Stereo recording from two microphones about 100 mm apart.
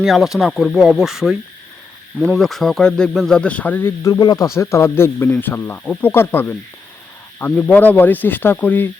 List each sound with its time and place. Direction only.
0.0 s speech: centre (ahead or behind); by 3.9 s 20° left (ahead or behind)
4.0 s speech: 40° left (ahead or behind); by 8.9 s 15° left (ahead or behind)